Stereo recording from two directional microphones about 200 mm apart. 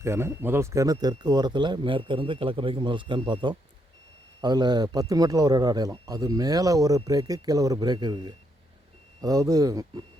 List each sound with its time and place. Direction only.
0.0 s a man's voice: 15° right (ahead or behind)